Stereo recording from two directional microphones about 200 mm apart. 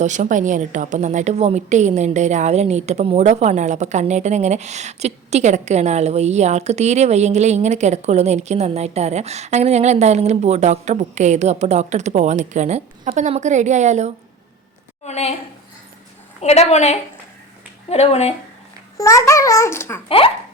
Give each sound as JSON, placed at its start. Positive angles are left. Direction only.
{"t": 0.0, "sound": "a woman's voice", "side_deg": -40}
{"t": 15.0, "sound": "a woman's voice", "side_deg": 30}
{"t": 16.4, "sound": "a woman's voice", "side_deg": 30}
{"t": 18.9, "sound": "a child's voice", "side_deg": 15}
{"t": 20.1, "sound": "speech", "side_deg": 25}